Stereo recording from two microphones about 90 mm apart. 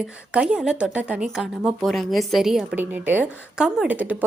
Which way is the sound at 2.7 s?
20° right (ahead or behind).